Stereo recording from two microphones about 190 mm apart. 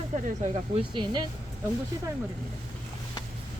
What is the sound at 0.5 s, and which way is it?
Speech, 25° right (ahead or behind).